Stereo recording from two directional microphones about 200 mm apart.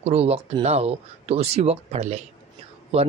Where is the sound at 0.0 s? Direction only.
30° right (ahead or behind).